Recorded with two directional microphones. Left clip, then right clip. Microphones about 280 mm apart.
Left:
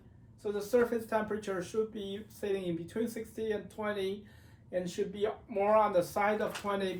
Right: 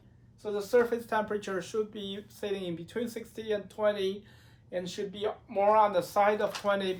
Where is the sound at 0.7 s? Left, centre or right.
Centre.